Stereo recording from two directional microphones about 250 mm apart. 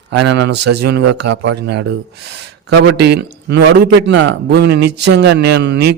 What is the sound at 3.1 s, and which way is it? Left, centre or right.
A man's voice, right.